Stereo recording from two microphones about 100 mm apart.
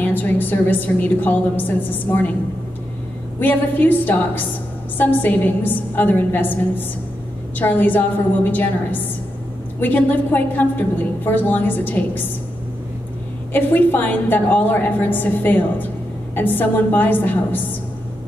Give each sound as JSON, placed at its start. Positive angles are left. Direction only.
{"t": 0.0, "sound": "a woman's voice", "side_deg": 15}
{"t": 3.3, "sound": "a woman's voice", "side_deg": 20}
{"t": 13.5, "sound": "a woman's voice", "side_deg": 20}